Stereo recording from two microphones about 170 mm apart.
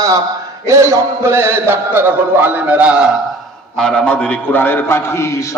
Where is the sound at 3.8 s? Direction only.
5° left (ahead or behind).